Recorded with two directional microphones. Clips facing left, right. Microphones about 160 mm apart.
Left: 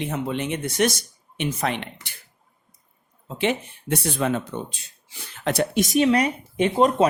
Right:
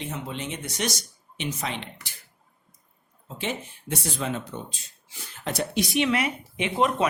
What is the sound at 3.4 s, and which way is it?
Speech, 65° left (ahead or behind).